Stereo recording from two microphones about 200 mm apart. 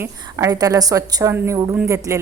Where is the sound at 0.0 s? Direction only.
15° right (ahead or behind).